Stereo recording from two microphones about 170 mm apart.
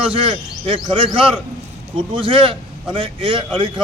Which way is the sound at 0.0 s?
35° right (ahead or behind).